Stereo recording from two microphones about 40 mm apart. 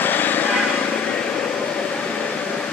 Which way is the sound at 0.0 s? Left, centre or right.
Left.